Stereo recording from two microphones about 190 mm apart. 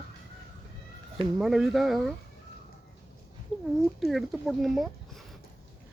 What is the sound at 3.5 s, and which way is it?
Speech, centre (ahead or behind).